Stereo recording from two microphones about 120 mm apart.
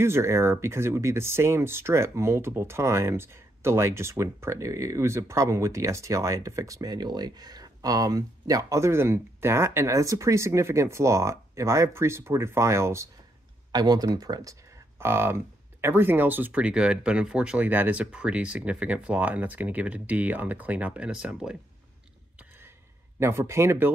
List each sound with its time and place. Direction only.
0.0 s speech: 20° right (ahead or behind)
13.7 s speech: 35° right (ahead or behind); by 21.5 s 5° right (ahead or behind)
23.1 s speech: 20° right (ahead or behind)